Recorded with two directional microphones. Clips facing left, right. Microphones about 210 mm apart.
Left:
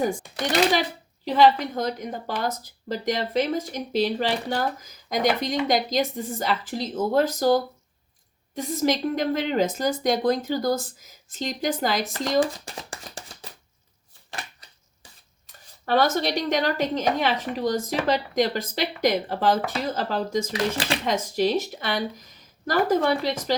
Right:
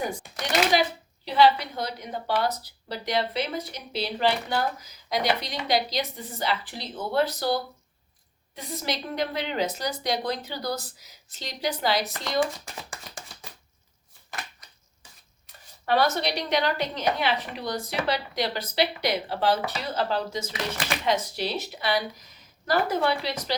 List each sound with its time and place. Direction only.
1.2 s a woman's voice: 45° left (ahead or behind)
15.9 s a woman's voice: 45° left (ahead or behind)